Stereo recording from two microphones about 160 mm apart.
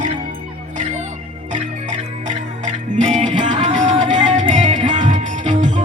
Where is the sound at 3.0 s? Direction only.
45° right (ahead or behind).